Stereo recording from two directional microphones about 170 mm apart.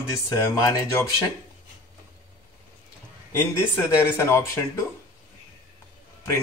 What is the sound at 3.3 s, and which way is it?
Speech, 15° left (ahead or behind).